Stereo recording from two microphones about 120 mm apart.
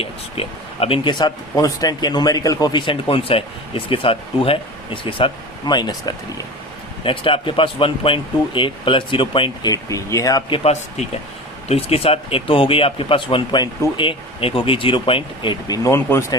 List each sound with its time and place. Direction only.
0.0 s speech: 55° left (ahead or behind); by 6.1 s 35° left (ahead or behind)
7.0 s speech: 50° left (ahead or behind)
9.7 s speech: 25° left (ahead or behind)
10.5 s speech: 60° left (ahead or behind); by 15.5 s 45° left (ahead or behind)
15.6 s speech: 35° left (ahead or behind)
15.9 s speech: 20° left (ahead or behind)